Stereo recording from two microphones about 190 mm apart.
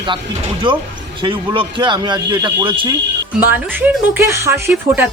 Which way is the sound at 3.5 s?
10° right (ahead or behind).